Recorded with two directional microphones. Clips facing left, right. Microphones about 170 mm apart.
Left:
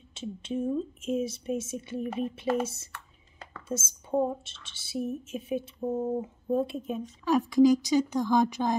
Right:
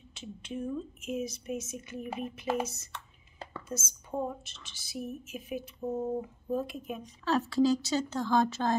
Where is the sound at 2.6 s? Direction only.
30° left (ahead or behind).